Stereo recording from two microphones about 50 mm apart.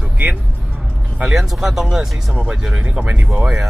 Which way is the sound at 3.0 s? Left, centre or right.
Right.